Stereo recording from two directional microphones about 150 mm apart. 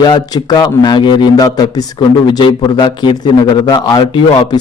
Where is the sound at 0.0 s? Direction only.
25° left (ahead or behind).